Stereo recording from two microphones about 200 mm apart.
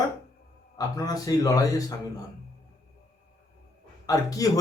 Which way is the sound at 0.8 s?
15° left (ahead or behind).